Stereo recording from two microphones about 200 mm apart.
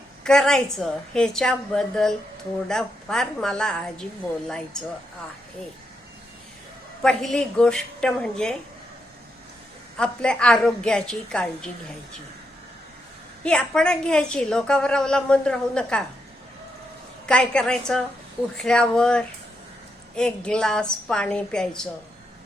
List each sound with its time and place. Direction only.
0.3 s a woman's voice: 5° left (ahead or behind)
7.0 s a woman's voice: 5° left (ahead or behind)
10.0 s a woman's voice: 5° left (ahead or behind)
13.4 s a woman's voice: 5° left (ahead or behind)
17.2 s a woman's voice: 5° left (ahead or behind)